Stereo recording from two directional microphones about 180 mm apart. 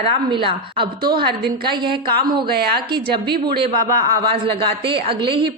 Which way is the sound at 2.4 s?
60° right (ahead or behind).